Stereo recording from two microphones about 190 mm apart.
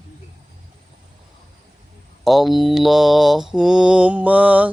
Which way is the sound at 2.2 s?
Centre (ahead or behind).